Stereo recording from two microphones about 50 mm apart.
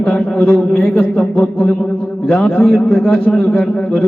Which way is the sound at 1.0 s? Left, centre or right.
Left.